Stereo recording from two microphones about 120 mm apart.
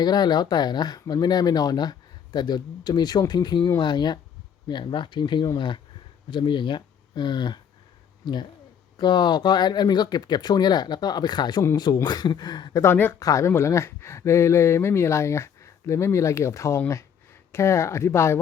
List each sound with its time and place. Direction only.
0.0 s speech: 35° left (ahead or behind)
12.8 s speech: 20° left (ahead or behind)